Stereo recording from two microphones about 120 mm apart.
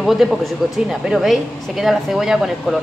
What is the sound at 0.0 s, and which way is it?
Speech, centre (ahead or behind).